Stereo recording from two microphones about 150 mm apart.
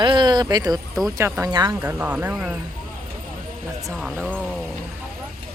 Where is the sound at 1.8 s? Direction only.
10° right (ahead or behind).